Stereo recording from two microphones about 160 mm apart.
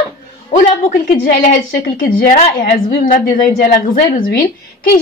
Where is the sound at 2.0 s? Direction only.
60° left (ahead or behind).